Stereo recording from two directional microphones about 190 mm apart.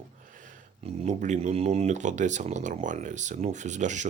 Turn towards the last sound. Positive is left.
turn(degrees=-40)  # may be behind; listen again after turning